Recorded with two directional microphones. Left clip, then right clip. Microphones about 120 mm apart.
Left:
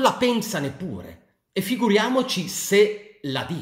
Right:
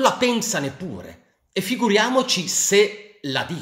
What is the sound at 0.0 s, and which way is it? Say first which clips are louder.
A man's voice: right 1 dB; 5° right (ahead or behind).